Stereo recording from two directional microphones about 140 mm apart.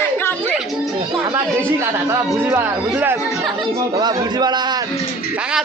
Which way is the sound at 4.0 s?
30° right (ahead or behind).